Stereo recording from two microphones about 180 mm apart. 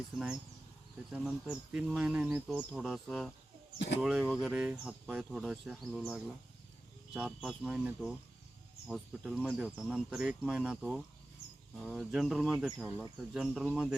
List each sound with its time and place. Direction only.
1.1 s speech: centre (ahead or behind)
3.8 s speech: 70° left (ahead or behind)
4.0 s speech: centre (ahead or behind)